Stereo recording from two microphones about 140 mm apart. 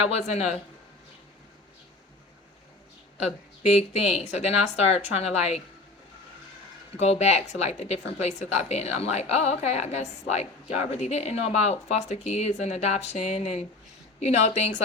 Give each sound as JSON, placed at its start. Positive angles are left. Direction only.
{"t": 0.1, "sound": "a woman's voice", "side_deg": 50}
{"t": 3.2, "sound": "a woman's voice", "side_deg": 50}
{"t": 6.9, "sound": "a woman's voice", "side_deg": 50}